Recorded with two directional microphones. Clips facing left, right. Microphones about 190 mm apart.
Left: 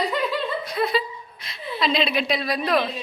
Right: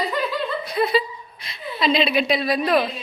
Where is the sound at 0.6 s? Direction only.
5° right (ahead or behind).